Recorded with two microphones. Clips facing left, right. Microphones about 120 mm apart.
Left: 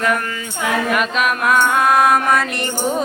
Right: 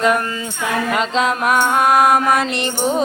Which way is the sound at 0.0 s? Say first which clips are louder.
Right 3 dB; 25° right (ahead or behind).